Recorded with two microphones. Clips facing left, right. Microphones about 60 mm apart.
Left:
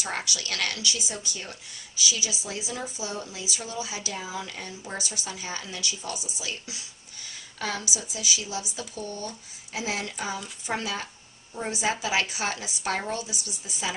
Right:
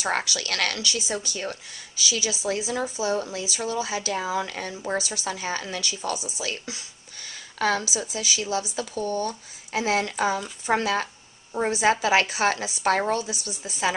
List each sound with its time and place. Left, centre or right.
0.0 s a woman's voice: right
7.9 s speech: right
9.0 s speech: right
9.7 s a woman's voice: right